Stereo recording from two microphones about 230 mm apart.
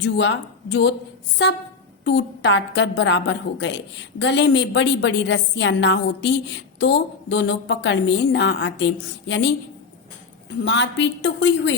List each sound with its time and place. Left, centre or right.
0.0 s a woman's voice: left
10.7 s a woman's voice: left